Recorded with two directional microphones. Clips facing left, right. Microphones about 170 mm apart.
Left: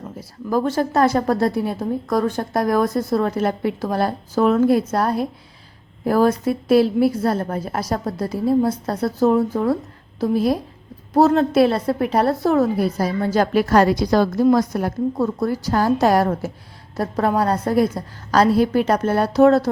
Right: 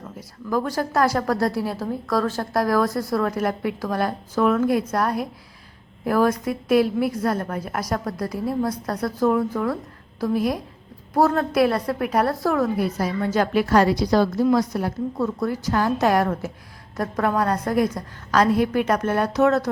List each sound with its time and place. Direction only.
0.2 s a woman's voice: 30° left (ahead or behind)
12.8 s a woman's voice: 35° left (ahead or behind)